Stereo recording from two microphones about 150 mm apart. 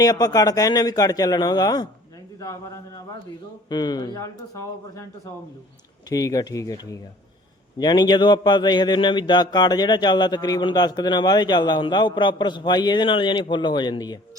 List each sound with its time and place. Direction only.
0.0 s a man's voice: 25° left (ahead or behind)